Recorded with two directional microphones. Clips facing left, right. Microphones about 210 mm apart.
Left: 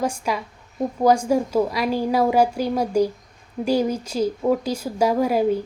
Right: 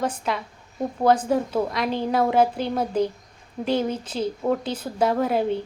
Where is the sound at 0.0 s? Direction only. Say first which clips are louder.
Left 2 dB; 10° left (ahead or behind).